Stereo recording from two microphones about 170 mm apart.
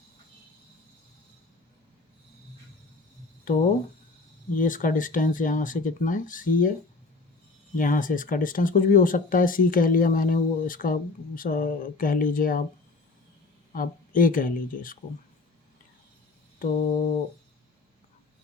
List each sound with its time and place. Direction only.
3.4 s speech: 50° left (ahead or behind)
7.8 s speech: 50° left (ahead or behind)
13.7 s speech: 55° left (ahead or behind)
16.6 s speech: 45° left (ahead or behind)